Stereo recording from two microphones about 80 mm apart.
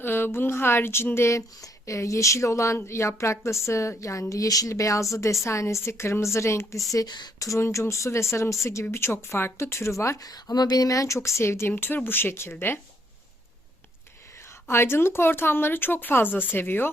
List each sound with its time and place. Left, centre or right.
0.0 s speech: left
6.9 s speech: left
7.3 s speech: left
10.0 s speech: left
11.7 s speech: left
14.7 s speech: left